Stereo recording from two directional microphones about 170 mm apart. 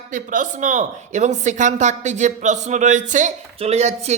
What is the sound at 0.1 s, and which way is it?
A woman's voice, 50° right (ahead or behind).